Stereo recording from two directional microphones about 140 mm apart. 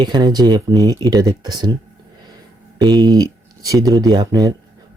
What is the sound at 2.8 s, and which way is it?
Speech, 30° right (ahead or behind).